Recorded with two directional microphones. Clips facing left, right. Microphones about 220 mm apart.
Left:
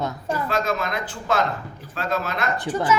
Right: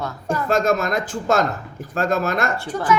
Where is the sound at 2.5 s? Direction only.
20° left (ahead or behind).